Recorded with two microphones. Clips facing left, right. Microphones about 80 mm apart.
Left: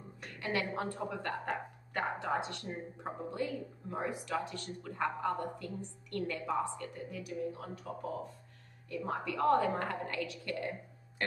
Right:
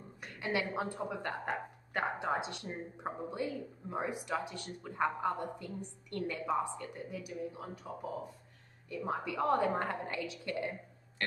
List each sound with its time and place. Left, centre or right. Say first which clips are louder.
0.2 s a woman's voice: right 1 dB; centre